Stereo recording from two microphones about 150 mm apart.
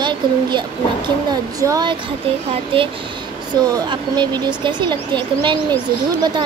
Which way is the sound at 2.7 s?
35° right (ahead or behind).